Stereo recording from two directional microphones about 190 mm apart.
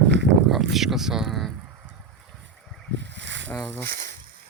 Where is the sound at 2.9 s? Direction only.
70° right (ahead or behind).